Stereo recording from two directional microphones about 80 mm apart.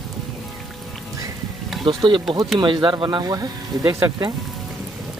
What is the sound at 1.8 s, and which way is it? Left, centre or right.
Speech, right.